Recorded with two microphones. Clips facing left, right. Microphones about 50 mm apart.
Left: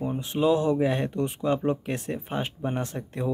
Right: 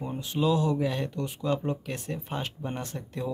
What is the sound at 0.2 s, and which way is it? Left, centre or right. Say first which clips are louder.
Speech: left 3 dB; left.